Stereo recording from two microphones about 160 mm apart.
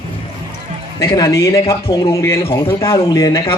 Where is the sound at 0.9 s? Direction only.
20° left (ahead or behind).